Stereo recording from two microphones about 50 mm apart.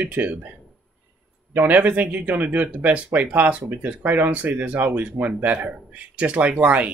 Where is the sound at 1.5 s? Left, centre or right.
Right.